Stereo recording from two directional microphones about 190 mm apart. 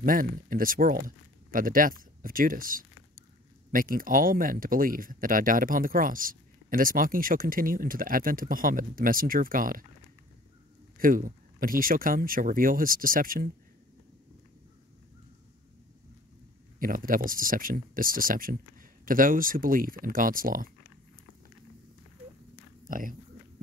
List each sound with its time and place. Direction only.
0.0 s speech: 45° right (ahead or behind)
11.0 s speech: 45° right (ahead or behind)
16.8 s speech: 45° right (ahead or behind)
22.8 s speech: 45° right (ahead or behind)